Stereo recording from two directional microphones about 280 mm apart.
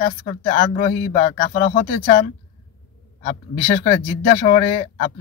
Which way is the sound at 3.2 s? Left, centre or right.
Left.